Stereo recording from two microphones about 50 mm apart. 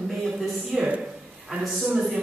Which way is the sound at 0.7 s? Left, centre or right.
Right.